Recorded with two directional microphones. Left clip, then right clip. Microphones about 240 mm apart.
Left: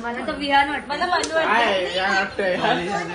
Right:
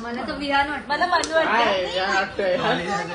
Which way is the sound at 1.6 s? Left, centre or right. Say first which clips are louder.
Left 1 dB; left.